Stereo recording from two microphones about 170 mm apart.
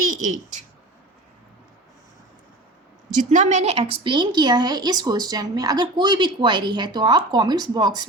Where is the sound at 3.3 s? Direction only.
45° right (ahead or behind).